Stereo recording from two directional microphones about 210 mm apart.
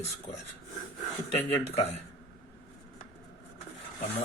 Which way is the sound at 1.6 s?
30° left (ahead or behind).